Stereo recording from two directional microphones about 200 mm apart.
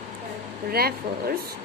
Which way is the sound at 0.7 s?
50° right (ahead or behind).